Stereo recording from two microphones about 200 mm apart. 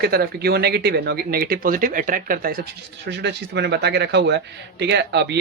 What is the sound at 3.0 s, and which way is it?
Speech, 60° right (ahead or behind).